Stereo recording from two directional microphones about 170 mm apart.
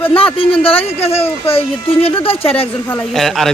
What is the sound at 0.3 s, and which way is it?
Speech, 30° left (ahead or behind).